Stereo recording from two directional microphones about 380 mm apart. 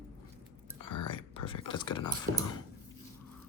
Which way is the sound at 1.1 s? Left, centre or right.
Centre.